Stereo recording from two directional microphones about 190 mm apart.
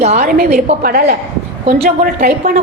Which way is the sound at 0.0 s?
35° right (ahead or behind).